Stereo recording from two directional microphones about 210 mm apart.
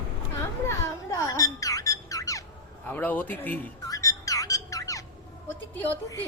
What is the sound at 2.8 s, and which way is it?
A man's voice, 10° left (ahead or behind).